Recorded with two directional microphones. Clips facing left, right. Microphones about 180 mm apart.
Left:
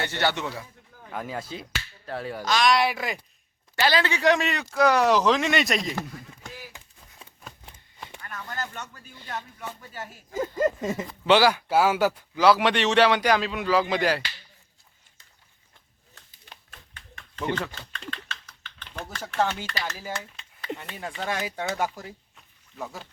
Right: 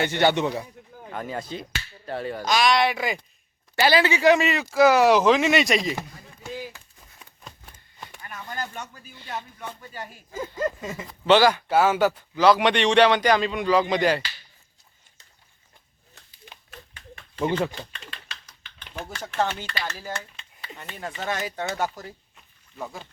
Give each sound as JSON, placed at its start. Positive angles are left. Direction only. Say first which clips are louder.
{"t": 0.0, "sound": "a man's voice", "louder": "right 6 dB", "side_deg": -15}
{"t": 1.1, "sound": "a man's voice", "louder": "right 1 dB", "side_deg": 5}
{"t": 2.4, "sound": "speech", "louder": "right 2 dB", "side_deg": -15}
{"t": 2.6, "sound": "a man's voice", "louder": "even", "side_deg": 5}
{"t": 8.2, "sound": "a sound", "louder": "right 1 dB", "side_deg": -10}
{"t": 9.2, "sound": "a man's voice", "louder": "right 1 dB", "side_deg": 0}
{"t": 17.2, "sound": "speech", "louder": "right 5 dB", "side_deg": -15}
{"t": 18.0, "sound": "typing", "louder": "left 5 dB", "side_deg": -10}
{"t": 19.1, "sound": "a man's voice", "louder": "even", "side_deg": 0}